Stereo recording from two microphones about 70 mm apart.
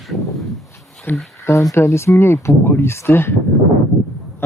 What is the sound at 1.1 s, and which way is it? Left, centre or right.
Speech, left.